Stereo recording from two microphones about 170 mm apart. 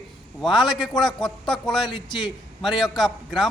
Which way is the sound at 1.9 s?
30° left (ahead or behind).